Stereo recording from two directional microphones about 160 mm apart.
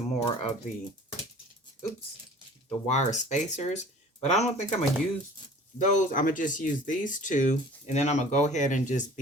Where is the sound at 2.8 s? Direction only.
45° left (ahead or behind).